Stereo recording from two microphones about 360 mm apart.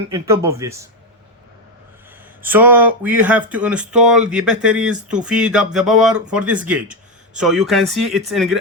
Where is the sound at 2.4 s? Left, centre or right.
Centre.